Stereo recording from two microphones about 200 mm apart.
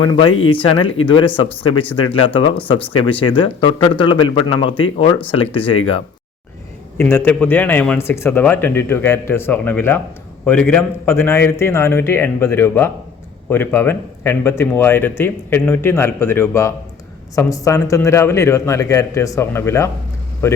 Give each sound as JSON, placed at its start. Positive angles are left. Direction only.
{"t": 0.1, "sound": "speech", "side_deg": 25}
{"t": 6.9, "sound": "speech", "side_deg": 10}